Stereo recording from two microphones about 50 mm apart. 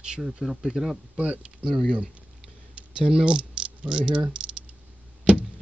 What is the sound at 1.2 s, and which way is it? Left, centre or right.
Speech, right.